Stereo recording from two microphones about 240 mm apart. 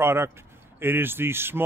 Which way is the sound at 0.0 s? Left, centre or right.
Centre.